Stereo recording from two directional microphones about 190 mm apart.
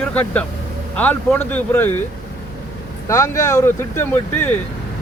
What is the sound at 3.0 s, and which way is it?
Speech, 15° left (ahead or behind).